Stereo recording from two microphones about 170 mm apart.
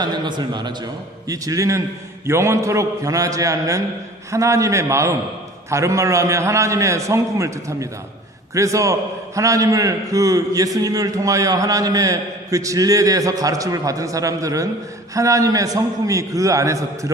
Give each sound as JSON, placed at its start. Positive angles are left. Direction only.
{"t": 0.0, "sound": "a man's voice", "side_deg": -25}